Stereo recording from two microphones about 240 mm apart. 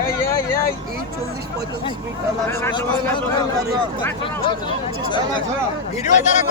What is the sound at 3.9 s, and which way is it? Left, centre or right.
A man's voice, centre.